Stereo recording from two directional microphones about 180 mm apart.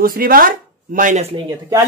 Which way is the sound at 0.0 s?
55° right (ahead or behind).